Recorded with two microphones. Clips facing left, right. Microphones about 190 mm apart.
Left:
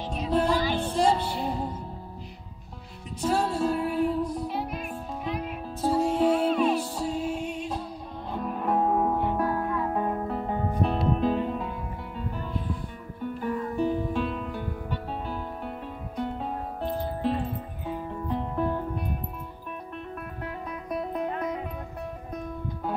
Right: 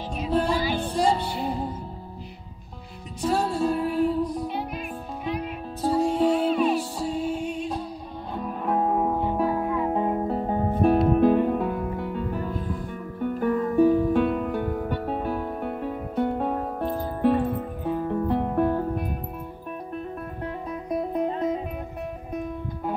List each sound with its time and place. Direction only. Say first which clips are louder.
0.1 s music: even; centre (ahead or behind)
3.3 s music: right 2 dB; centre (ahead or behind); by 10.8 s 35° right (ahead or behind)
10.8 s music: right 8 dB; 55° right (ahead or behind)
21.1 s music: right 6 dB; 25° right (ahead or behind)